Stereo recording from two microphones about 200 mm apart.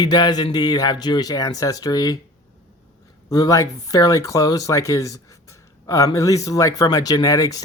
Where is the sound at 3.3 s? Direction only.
15° left (ahead or behind).